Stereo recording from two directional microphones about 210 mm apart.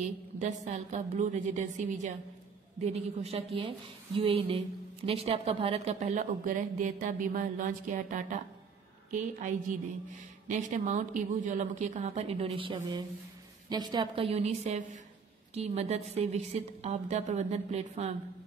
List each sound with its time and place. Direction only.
0.0 s a woman's voice: 35° right (ahead or behind)